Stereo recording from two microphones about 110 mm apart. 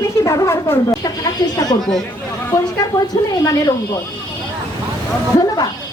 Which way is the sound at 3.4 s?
30° left (ahead or behind).